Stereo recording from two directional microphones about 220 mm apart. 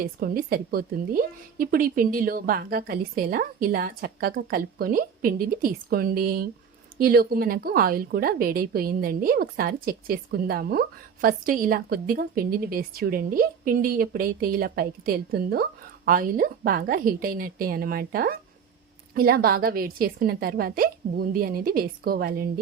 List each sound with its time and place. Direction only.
0.0 s a woman's voice: 40° right (ahead or behind)